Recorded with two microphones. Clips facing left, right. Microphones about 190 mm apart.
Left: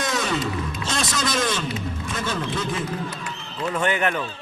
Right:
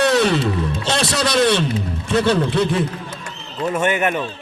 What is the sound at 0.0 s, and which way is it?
Music, 70° right (ahead or behind).